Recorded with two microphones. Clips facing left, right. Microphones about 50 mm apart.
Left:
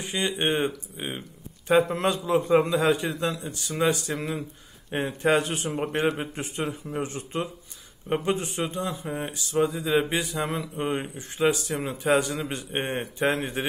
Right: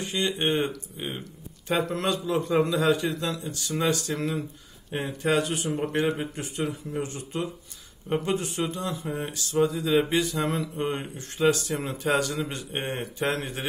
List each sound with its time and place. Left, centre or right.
0.0 s a man's voice: centre
4.9 s a man's voice: left
9.9 s a man's voice: centre
12.5 s a man's voice: left